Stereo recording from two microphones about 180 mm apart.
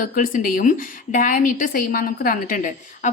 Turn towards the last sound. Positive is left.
turn(degrees=45)  # may be behind; listen again after turning